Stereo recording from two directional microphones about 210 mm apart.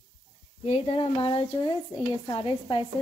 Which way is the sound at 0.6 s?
30° left (ahead or behind).